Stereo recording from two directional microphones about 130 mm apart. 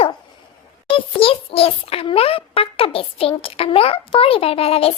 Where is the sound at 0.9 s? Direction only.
45° left (ahead or behind).